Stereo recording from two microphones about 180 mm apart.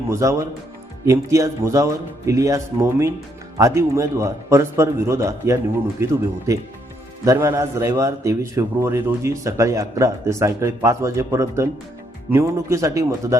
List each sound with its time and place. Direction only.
0.1 s a man's voice: 15° right (ahead or behind)
7.3 s a man's voice: 15° right (ahead or behind)